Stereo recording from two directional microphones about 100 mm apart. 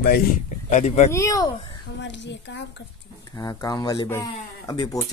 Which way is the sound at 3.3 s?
35° left (ahead or behind).